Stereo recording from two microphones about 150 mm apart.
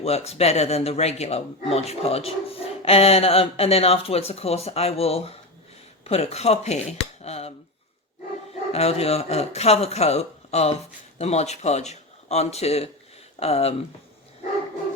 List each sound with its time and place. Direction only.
0.0 s speech: 45° left (ahead or behind)
8.7 s speech: 45° left (ahead or behind)